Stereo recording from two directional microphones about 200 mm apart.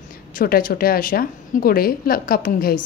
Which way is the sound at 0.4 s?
45° left (ahead or behind).